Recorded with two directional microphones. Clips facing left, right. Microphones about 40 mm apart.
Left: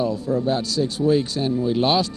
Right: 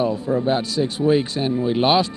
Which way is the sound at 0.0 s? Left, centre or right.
Right.